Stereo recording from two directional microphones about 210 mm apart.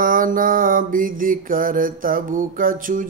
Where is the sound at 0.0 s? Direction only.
40° right (ahead or behind).